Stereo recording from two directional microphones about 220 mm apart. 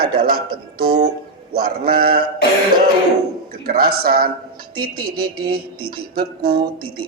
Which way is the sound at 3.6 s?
45° right (ahead or behind).